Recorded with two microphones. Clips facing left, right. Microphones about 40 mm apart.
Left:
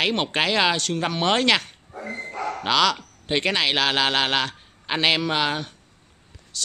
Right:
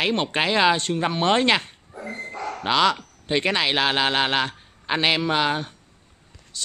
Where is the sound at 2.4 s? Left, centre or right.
Left.